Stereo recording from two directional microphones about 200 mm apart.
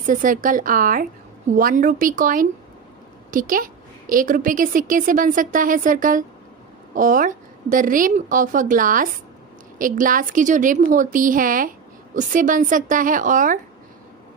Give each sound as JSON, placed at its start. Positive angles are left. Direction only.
{"t": 0.0, "sound": "a woman's voice", "side_deg": -40}